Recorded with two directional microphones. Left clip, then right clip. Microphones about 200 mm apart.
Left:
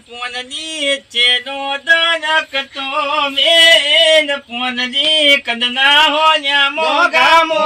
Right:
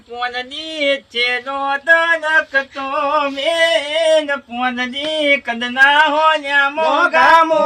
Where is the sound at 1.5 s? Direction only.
5° right (ahead or behind).